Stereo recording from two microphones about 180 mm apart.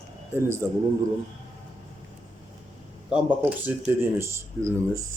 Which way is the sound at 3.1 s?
10° right (ahead or behind).